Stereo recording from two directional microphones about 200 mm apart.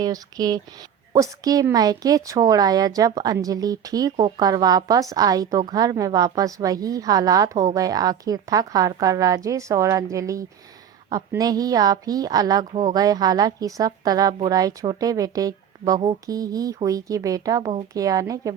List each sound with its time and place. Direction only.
0.0 s a woman's voice: 20° right (ahead or behind)